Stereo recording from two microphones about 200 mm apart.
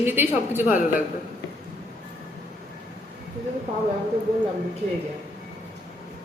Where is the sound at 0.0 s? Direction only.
10° right (ahead or behind).